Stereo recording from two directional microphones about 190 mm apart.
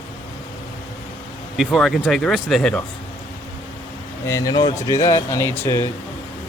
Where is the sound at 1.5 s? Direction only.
Centre (ahead or behind).